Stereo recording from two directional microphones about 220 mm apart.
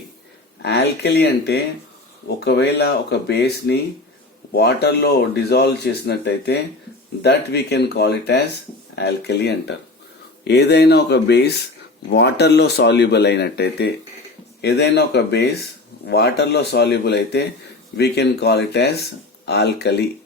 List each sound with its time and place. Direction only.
0.6 s speech: 50° left (ahead or behind)